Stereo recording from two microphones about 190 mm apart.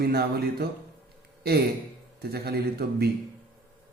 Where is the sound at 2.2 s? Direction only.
55° right (ahead or behind).